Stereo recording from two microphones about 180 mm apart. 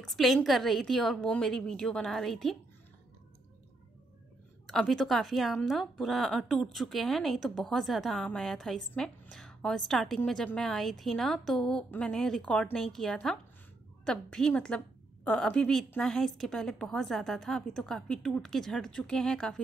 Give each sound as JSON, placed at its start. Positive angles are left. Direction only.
{"t": 0.0, "sound": "a woman's voice", "side_deg": 0}
{"t": 4.6, "sound": "a woman's voice", "side_deg": 0}